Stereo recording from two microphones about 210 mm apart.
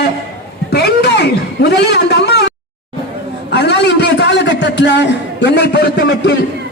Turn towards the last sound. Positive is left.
turn(degrees=55)  # may be behind; listen again after turning